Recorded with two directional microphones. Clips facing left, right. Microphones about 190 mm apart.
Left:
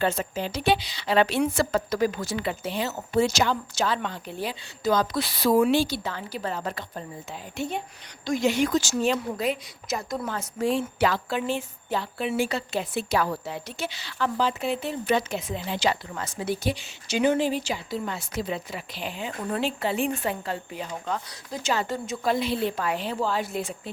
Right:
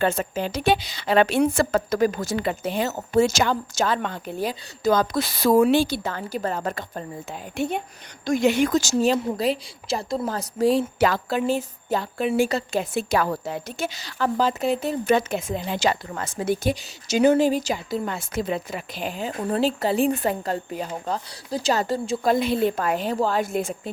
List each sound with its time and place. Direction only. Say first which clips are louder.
0.0 s a woman's voice: right 3 dB; 50° right (ahead or behind)